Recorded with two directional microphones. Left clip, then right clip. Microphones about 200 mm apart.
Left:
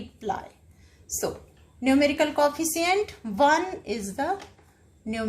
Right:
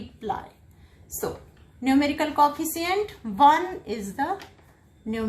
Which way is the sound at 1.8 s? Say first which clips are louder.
Left 1 dB; 45° left (ahead or behind).